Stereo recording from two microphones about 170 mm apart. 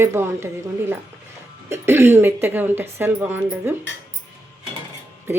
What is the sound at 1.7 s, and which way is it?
Speech, 15° right (ahead or behind).